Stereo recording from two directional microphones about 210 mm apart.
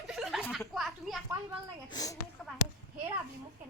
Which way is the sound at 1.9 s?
15° left (ahead or behind).